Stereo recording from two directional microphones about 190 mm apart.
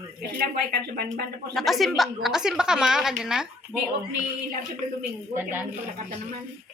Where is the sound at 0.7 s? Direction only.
50° right (ahead or behind).